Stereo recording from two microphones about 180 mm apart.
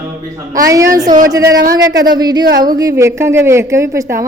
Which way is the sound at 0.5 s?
20° right (ahead or behind).